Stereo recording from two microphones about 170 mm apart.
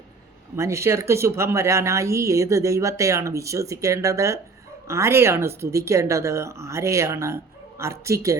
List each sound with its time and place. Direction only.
0.5 s a woman's voice: 15° right (ahead or behind)